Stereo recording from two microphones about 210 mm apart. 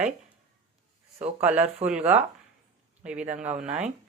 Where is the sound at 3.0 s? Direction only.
5° right (ahead or behind).